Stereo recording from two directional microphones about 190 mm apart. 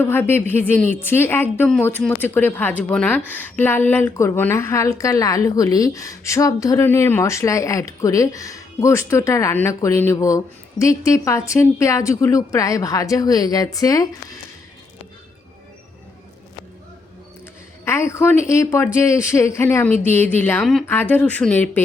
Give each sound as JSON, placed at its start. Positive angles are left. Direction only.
{"t": 0.0, "sound": "a woman's voice", "side_deg": 10}
{"t": 17.8, "sound": "a woman's voice", "side_deg": 15}